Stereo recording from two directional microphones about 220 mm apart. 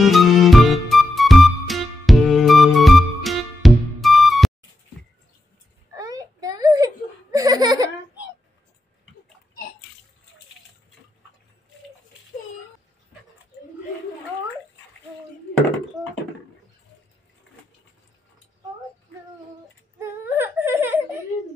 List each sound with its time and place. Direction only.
0.0 s music: centre (ahead or behind)
5.9 s giggle: 15° right (ahead or behind)
20.0 s whimper: 10° right (ahead or behind)